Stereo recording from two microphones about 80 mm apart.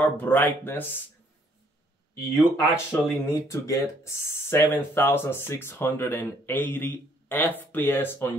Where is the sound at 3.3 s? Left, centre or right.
Left.